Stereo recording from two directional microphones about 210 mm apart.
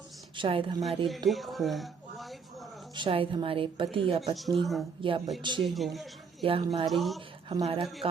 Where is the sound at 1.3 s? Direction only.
Centre (ahead or behind).